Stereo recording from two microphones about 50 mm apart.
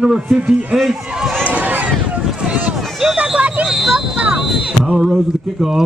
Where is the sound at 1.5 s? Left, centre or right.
Right.